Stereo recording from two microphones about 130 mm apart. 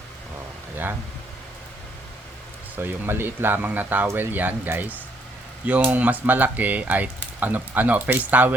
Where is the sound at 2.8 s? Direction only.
15° right (ahead or behind).